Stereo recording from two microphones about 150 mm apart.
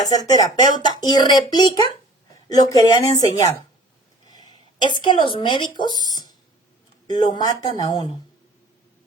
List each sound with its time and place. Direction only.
0.1 s speech: 25° left (ahead or behind)
4.3 s a sound: 25° left (ahead or behind)
4.9 s speech: 35° left (ahead or behind)